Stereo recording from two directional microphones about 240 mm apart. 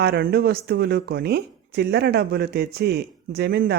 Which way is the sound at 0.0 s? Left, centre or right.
Right.